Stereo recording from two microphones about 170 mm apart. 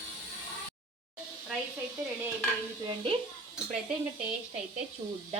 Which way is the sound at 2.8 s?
30° right (ahead or behind).